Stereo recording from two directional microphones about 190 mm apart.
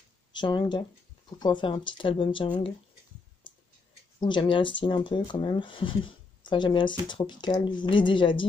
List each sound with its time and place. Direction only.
0.3 s speech: 25° left (ahead or behind)
4.2 s speech: 25° left (ahead or behind)